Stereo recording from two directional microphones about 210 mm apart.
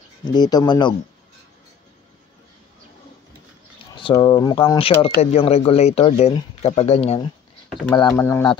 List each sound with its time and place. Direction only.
0.2 s speech: 20° left (ahead or behind)
3.9 s speech: 25° left (ahead or behind)
7.9 s speech: 15° left (ahead or behind)